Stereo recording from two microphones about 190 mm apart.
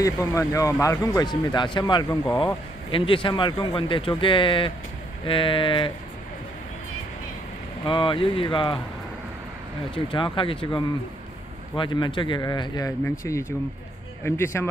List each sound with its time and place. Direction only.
0.0 s a man's voice: 15° left (ahead or behind)
7.8 s speech: 25° left (ahead or behind)
9.8 s a man's voice: 25° left (ahead or behind)